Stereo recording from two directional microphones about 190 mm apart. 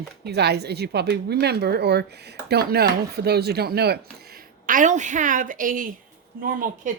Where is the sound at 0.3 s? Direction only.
60° right (ahead or behind).